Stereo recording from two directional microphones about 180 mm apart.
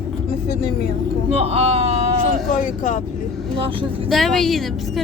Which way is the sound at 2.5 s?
45° left (ahead or behind).